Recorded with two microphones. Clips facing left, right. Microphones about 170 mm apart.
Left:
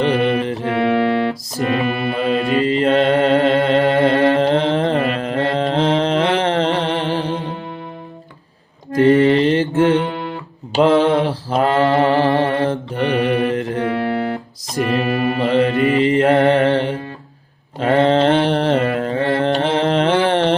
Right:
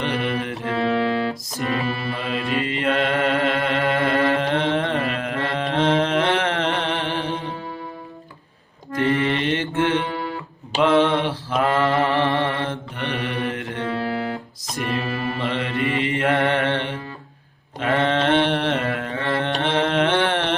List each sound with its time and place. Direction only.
0.0 s music: 35° left (ahead or behind)
0.7 s music: 60° left (ahead or behind)
2.2 s mantra: 35° left (ahead or behind)
4.2 s carnatic music: 35° left (ahead or behind)
9.0 s mantra: 40° left (ahead or behind)
13.8 s music: 60° left (ahead or behind)
15.0 s mantra: 50° left (ahead or behind)
15.4 s mantra: 40° left (ahead or behind)